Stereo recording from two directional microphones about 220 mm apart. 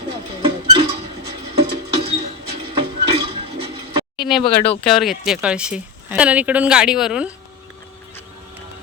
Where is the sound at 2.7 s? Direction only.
25° right (ahead or behind).